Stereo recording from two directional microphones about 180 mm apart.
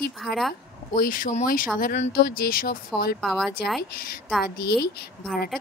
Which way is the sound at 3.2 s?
Centre (ahead or behind).